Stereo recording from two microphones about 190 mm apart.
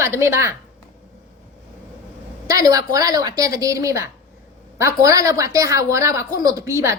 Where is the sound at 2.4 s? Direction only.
20° right (ahead or behind).